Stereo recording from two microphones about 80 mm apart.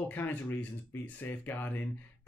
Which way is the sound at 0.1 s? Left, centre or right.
Left.